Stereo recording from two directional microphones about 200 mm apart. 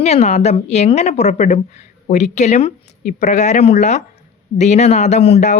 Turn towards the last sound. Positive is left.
turn(degrees=30)  # may be behind; listen again after turning